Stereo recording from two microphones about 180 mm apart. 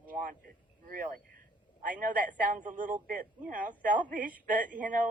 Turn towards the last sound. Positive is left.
turn(degrees=-45)  # may be behind; listen again after turning